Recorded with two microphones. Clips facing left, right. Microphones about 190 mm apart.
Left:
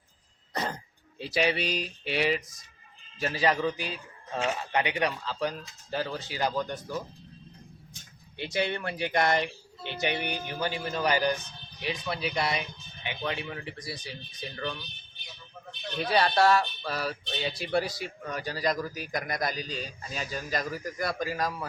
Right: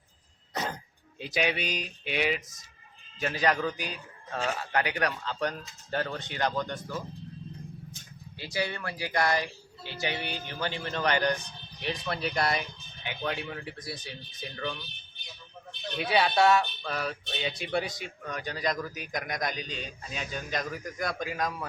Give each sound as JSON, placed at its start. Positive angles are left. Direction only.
{"t": 0.5, "sound": "cough", "side_deg": 0}
{"t": 1.2, "sound": "speech", "side_deg": 0}
{"t": 8.4, "sound": "a man's voice", "side_deg": 20}
{"t": 16.0, "sound": "speech", "side_deg": 0}